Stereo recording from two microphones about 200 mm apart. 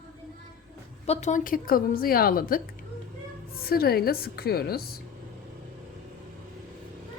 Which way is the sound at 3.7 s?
50° left (ahead or behind).